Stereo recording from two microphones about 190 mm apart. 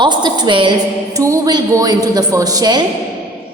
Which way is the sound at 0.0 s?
25° right (ahead or behind).